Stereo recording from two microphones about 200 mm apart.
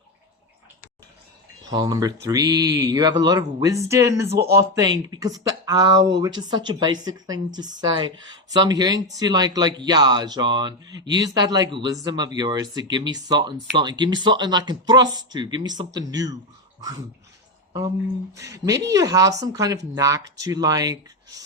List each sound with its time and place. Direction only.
1.7 s speech: 20° right (ahead or behind)
4.3 s speech: 55° right (ahead or behind)
4.7 s speech: 20° right (ahead or behind)
18.3 s speech: 15° right (ahead or behind)